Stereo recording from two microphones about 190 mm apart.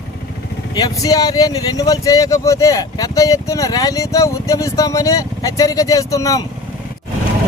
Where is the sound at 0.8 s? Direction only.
20° left (ahead or behind).